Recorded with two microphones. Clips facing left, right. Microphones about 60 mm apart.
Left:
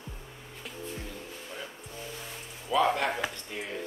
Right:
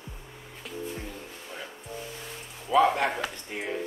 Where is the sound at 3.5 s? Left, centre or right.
Right.